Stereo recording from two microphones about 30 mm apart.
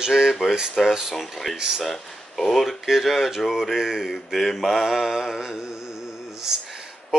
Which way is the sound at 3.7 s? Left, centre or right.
Centre.